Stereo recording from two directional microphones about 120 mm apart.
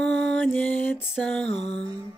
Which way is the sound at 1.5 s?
60° left (ahead or behind).